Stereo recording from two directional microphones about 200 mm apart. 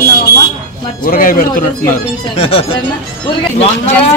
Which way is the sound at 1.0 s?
45° left (ahead or behind).